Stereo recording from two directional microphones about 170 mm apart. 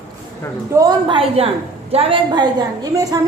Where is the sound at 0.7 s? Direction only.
25° right (ahead or behind).